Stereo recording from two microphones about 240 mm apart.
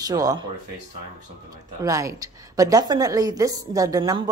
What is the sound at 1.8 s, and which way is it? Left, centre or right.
A woman's voice, centre.